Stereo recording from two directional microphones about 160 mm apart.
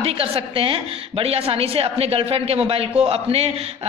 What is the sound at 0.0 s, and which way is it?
A woman's voice, 35° right (ahead or behind).